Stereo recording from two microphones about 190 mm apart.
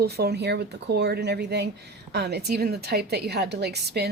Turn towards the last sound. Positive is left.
turn(degrees=-60)  # may be behind; listen again after turning